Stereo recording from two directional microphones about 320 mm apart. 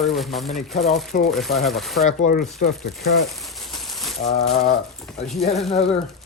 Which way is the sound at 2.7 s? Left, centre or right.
Centre.